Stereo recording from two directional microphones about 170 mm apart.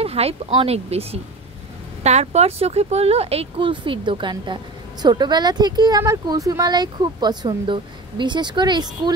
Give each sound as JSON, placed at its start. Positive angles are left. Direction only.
{"t": 0.0, "sound": "speech", "side_deg": -35}